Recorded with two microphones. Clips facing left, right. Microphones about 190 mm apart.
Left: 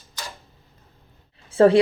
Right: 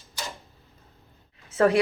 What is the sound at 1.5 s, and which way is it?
Speech, 30° left (ahead or behind).